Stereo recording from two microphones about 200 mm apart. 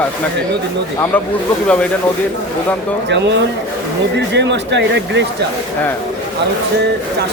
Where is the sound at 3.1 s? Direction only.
60° right (ahead or behind).